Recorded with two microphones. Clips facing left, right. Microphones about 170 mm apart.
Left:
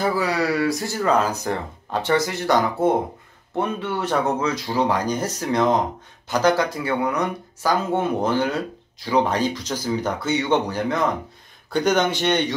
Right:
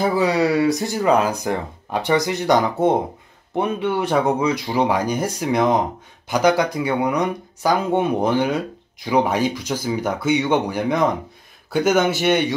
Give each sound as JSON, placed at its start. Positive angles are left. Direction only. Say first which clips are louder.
{"t": 0.0, "sound": "speech", "louder": "right 4 dB", "side_deg": -20}